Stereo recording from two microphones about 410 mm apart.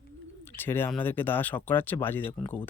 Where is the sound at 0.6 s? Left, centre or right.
Centre.